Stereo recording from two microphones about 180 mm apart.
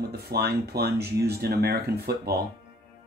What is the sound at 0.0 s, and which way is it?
Speech, 60° right (ahead or behind).